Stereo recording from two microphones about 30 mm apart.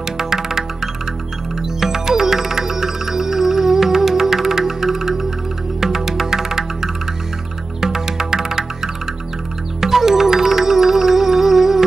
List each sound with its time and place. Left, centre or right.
0.2 s music: centre
1.8 s music: centre